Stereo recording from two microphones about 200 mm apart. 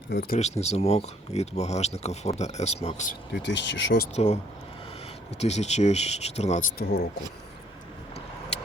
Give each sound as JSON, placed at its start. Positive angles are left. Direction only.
{"t": 0.1, "sound": "speech", "side_deg": 55}
{"t": 0.6, "sound": "speech", "side_deg": 30}
{"t": 3.4, "sound": "speech", "side_deg": 60}
{"t": 4.1, "sound": "speech", "side_deg": 35}
{"t": 5.4, "sound": "speech", "side_deg": 35}
{"t": 6.7, "sound": "speech", "side_deg": 50}
{"t": 8.5, "sound": "vehicle", "side_deg": 30}